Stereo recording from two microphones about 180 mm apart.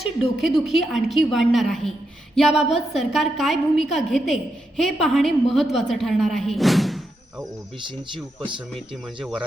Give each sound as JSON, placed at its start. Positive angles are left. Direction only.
{"t": 0.2, "sound": "a woman's voice", "side_deg": 0}
{"t": 7.9, "sound": "speech", "side_deg": -25}
{"t": 9.2, "sound": "a woman's voice", "side_deg": -5}